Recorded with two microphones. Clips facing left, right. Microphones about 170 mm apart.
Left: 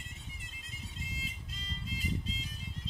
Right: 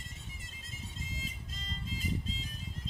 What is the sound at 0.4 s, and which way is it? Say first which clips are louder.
Music: right 1 dB; 45° right (ahead or behind).